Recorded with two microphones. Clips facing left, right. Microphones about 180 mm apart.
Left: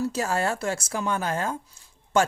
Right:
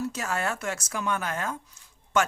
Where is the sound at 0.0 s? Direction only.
30° left (ahead or behind).